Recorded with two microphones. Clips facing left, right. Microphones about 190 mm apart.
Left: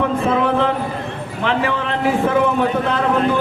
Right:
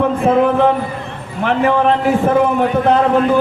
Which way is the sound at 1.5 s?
55° right (ahead or behind).